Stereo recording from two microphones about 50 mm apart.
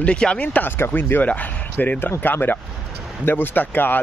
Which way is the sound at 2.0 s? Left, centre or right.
Left.